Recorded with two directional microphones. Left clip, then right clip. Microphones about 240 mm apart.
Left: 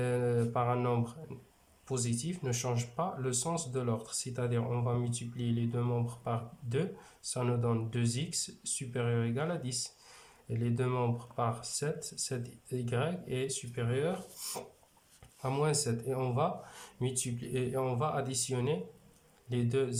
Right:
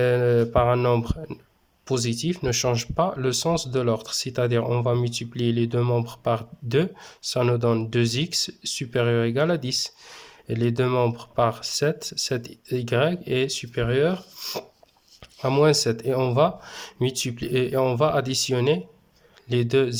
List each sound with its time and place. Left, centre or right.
0.0 s speech: right